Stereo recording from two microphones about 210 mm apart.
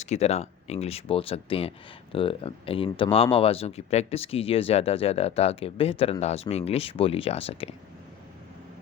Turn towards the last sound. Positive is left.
turn(degrees=25)  # may be behind; listen again after turning